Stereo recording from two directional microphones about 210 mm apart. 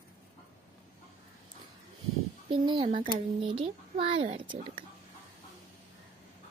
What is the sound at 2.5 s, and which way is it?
A child's voice, 20° right (ahead or behind).